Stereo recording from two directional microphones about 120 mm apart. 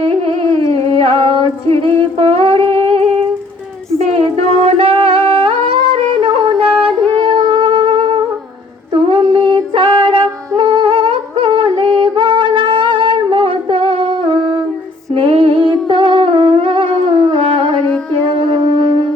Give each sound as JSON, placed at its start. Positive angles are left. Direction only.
{"t": 0.1, "sound": "music", "side_deg": -50}
{"t": 3.9, "sound": "singing", "side_deg": -55}
{"t": 7.2, "sound": "music", "side_deg": -35}
{"t": 8.9, "sound": "a sound", "side_deg": -45}
{"t": 10.6, "sound": "humming", "side_deg": -40}
{"t": 18.3, "sound": "a sound", "side_deg": -45}